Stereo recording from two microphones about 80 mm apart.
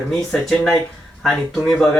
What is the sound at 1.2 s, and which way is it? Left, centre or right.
Speech, centre.